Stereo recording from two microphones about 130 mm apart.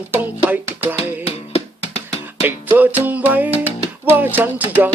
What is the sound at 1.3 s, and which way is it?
Music, 50° left (ahead or behind).